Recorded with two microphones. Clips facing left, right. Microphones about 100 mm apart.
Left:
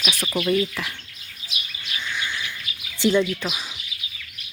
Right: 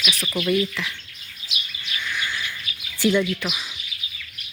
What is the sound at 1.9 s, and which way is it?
Bird, 20° left (ahead or behind).